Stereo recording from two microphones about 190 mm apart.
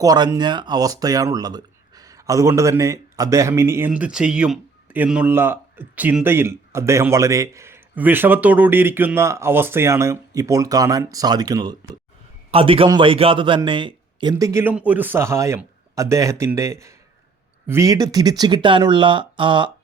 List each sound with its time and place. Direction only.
0.0 s speech: 20° right (ahead or behind)